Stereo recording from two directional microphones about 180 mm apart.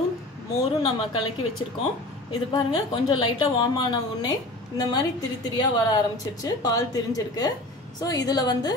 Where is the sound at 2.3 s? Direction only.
25° left (ahead or behind).